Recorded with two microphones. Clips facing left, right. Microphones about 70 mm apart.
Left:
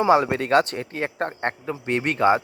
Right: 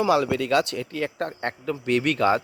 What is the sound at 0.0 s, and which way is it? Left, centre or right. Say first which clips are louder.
Speech: left 3 dB; left.